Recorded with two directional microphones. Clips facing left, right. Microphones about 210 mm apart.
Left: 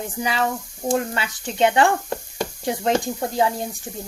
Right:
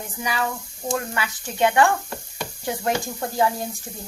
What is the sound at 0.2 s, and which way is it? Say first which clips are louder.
Speech: left 3 dB; 25° left (ahead or behind).